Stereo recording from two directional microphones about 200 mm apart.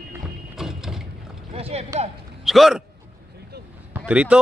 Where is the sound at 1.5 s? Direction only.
30° right (ahead or behind).